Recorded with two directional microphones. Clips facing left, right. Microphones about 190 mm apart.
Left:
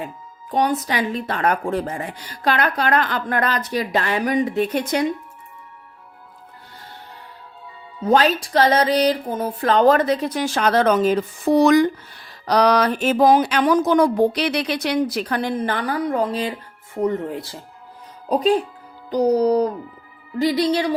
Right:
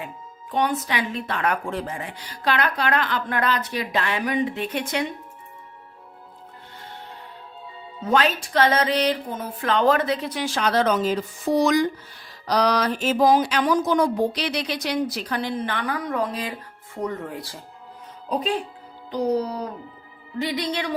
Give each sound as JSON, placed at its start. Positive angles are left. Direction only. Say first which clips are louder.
{"t": 0.5, "sound": "speech", "louder": "left 3 dB", "side_deg": 40}
{"t": 8.0, "sound": "music", "louder": "left 4 dB", "side_deg": 35}
{"t": 12.5, "sound": "speech", "louder": "left 4 dB", "side_deg": 60}
{"t": 19.1, "sound": "music", "louder": "left 7 dB", "side_deg": 40}